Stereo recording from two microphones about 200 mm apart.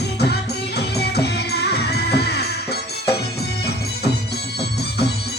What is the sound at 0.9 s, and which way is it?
Music, 55° left (ahead or behind).